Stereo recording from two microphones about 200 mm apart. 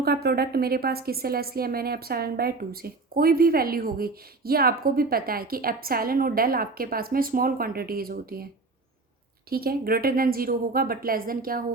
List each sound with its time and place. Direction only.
0.0 s a woman's voice: 50° right (ahead or behind)
9.5 s a woman's voice: 50° right (ahead or behind)